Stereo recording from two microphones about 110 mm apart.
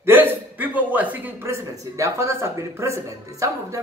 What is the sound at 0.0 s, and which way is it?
Speech, 20° right (ahead or behind).